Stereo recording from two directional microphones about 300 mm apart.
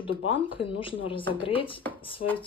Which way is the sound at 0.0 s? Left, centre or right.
Centre.